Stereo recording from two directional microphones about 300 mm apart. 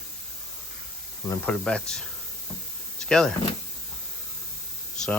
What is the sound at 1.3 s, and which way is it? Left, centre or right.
Speech, centre.